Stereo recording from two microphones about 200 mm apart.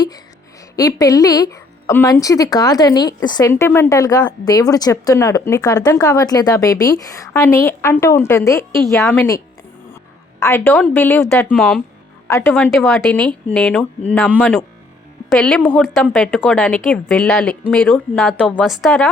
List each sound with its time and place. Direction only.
0.8 s speech: 15° left (ahead or behind)
10.4 s a woman's voice: 10° left (ahead or behind)
12.3 s a woman's voice: 10° left (ahead or behind)